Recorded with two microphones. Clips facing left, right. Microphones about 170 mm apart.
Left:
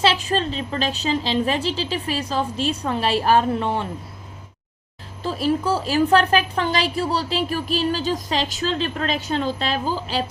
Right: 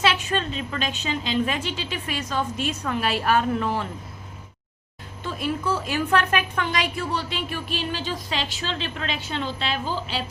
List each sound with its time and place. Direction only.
0.0 s a woman's voice: 30° left (ahead or behind)
5.2 s a woman's voice: 35° left (ahead or behind)